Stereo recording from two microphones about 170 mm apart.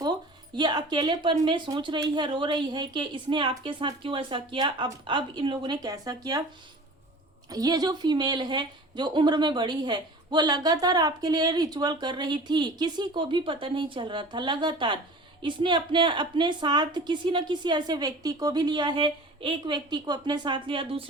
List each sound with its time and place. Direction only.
0.5 s a woman's voice: 25° right (ahead or behind)
7.5 s a woman's voice: 20° right (ahead or behind)